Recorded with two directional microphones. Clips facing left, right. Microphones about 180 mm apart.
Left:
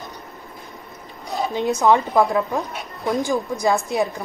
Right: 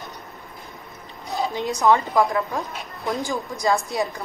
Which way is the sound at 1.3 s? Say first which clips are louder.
Left 2 dB; 20° left (ahead or behind).